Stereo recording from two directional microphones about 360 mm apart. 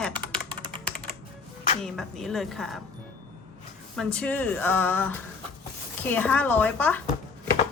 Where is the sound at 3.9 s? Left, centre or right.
Centre.